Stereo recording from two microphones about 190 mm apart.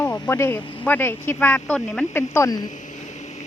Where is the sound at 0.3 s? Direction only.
10° left (ahead or behind).